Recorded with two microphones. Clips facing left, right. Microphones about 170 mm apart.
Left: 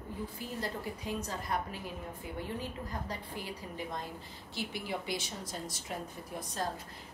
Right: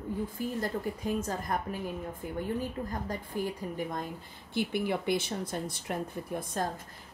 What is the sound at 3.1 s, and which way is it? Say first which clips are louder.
A woman's voice: right 7 dB; 45° right (ahead or behind).